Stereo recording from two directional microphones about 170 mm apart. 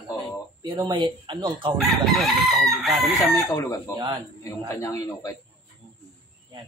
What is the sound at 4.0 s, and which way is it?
Speech, 30° right (ahead or behind).